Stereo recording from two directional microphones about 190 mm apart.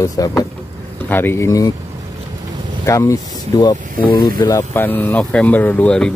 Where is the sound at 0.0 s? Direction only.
20° left (ahead or behind).